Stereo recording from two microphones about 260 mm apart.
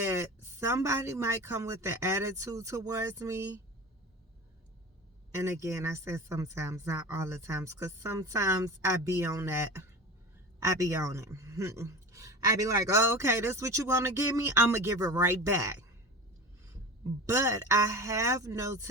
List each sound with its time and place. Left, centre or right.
0.0 s speech: centre
5.3 s speech: centre
17.2 s speech: centre